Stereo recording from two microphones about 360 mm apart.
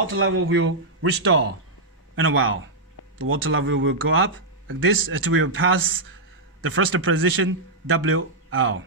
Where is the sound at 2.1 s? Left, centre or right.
Right.